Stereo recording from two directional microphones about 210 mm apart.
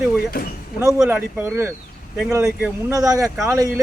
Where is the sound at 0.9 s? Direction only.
5° right (ahead or behind).